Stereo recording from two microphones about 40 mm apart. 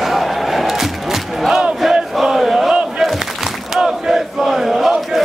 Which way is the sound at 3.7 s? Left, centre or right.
Centre.